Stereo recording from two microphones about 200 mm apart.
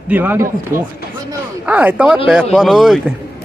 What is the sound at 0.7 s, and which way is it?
Speech, 45° right (ahead or behind).